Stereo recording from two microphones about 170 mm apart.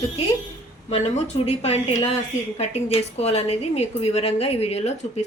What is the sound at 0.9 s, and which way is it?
A woman's voice, 35° left (ahead or behind).